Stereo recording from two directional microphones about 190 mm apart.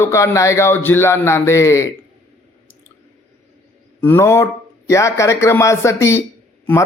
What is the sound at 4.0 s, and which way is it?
Speech, 10° left (ahead or behind).